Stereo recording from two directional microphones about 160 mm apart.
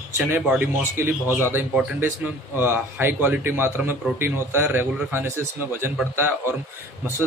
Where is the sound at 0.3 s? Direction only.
10° right (ahead or behind).